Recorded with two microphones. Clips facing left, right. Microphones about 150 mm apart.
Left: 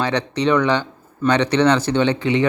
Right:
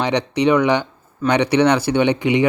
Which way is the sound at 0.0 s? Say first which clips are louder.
Right 2 dB; 15° right (ahead or behind).